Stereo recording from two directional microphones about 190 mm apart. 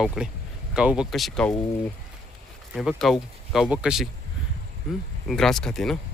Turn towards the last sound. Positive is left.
turn(degrees=0)  # may be behind; listen again after turning